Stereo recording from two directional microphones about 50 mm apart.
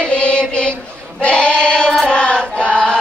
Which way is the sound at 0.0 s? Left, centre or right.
Left.